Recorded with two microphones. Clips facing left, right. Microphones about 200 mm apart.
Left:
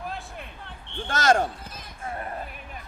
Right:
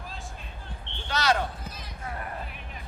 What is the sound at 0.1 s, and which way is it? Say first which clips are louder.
Basketball bounce: left 5 dB; 60° left (ahead or behind).